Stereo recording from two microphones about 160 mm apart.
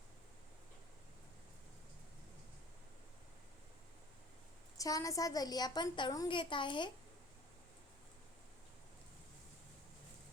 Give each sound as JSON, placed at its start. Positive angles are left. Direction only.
{"t": 4.8, "sound": "a woman's voice", "side_deg": 20}